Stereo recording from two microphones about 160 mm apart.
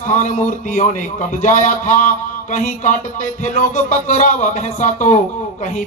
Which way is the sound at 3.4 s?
55° left (ahead or behind).